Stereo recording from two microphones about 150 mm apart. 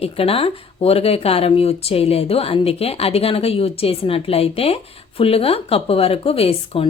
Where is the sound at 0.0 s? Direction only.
40° left (ahead or behind).